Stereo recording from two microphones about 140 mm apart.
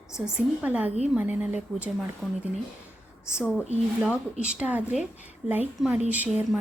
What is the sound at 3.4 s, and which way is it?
A woman's voice, 5° right (ahead or behind).